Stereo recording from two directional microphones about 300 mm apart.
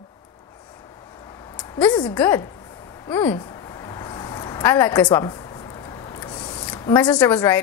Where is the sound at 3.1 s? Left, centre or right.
Centre.